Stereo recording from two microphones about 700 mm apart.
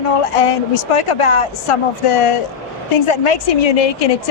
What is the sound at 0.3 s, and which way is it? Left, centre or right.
Speech, left.